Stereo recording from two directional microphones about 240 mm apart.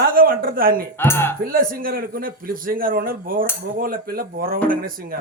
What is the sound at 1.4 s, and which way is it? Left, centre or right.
A man's voice, right.